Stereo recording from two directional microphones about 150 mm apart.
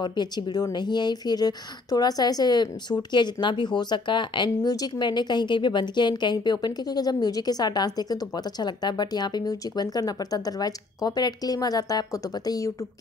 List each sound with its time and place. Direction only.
0.0 s speech: 30° left (ahead or behind)